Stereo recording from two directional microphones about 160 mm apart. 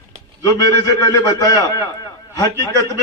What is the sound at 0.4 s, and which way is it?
A man's voice, 25° left (ahead or behind).